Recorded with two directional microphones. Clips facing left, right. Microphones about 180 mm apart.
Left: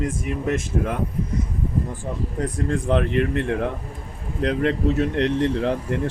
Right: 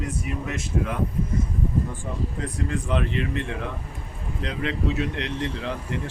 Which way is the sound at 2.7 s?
55° left (ahead or behind).